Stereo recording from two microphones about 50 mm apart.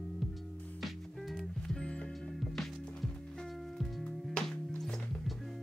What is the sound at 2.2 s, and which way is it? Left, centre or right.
Music, centre.